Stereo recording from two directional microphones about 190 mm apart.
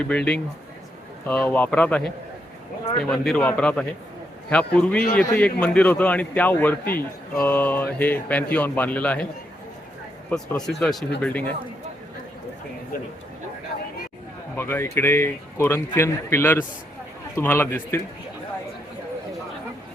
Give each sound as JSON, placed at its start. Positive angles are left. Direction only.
{"t": 0.0, "sound": "speech", "side_deg": 5}
{"t": 10.2, "sound": "speech", "side_deg": 5}
{"t": 14.5, "sound": "speech", "side_deg": 15}